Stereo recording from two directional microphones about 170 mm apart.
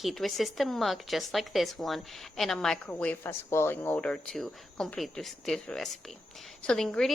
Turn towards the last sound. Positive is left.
turn(degrees=5)  # may be behind; listen again after turning